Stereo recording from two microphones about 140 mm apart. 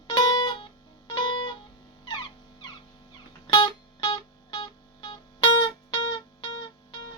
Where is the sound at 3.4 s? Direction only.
35° left (ahead or behind).